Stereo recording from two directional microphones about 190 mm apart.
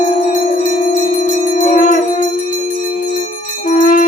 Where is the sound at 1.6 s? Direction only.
45° left (ahead or behind).